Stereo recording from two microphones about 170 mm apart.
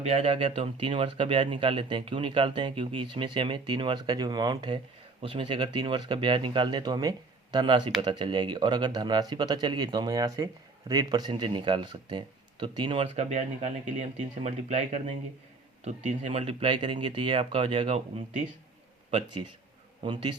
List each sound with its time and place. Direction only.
0.0 s speech: 35° right (ahead or behind)
13.3 s a man's voice: 45° right (ahead or behind)
16.4 s speech: 30° right (ahead or behind)
20.1 s speech: 30° right (ahead or behind)